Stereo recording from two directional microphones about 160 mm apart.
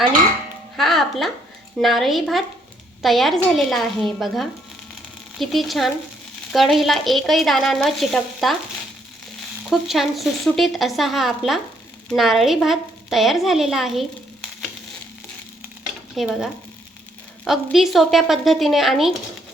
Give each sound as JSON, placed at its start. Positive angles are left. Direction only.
{"t": 0.8, "sound": "a woman's voice", "side_deg": 0}
{"t": 9.6, "sound": "a woman's voice", "side_deg": 0}
{"t": 16.1, "sound": "a woman's voice", "side_deg": 0}